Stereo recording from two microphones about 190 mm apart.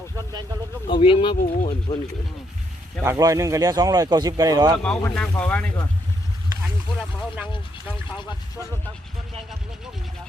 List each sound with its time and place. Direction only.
0.9 s speech: 25° left (ahead or behind)
3.0 s speech: 15° right (ahead or behind)
4.8 s speech: 5° left (ahead or behind)